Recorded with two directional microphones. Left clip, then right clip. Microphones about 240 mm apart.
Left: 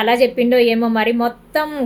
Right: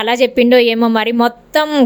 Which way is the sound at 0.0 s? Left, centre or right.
Right.